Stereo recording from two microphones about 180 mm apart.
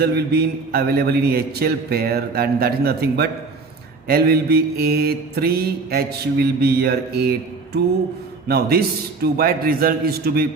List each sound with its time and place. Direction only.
0.0 s mantra: 65° right (ahead or behind)